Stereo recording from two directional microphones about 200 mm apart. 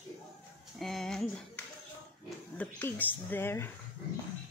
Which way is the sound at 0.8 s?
Centre (ahead or behind).